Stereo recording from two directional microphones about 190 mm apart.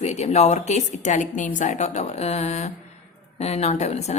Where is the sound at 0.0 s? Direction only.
35° left (ahead or behind).